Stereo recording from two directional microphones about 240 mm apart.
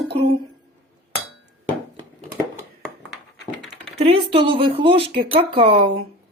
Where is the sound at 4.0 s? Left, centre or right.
Right.